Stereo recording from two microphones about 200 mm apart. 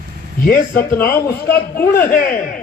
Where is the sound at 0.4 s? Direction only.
45° left (ahead or behind).